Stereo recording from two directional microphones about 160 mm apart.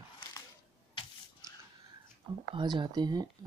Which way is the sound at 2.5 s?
30° right (ahead or behind).